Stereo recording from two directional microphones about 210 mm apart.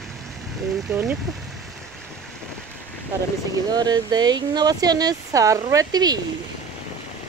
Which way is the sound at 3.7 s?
20° right (ahead or behind).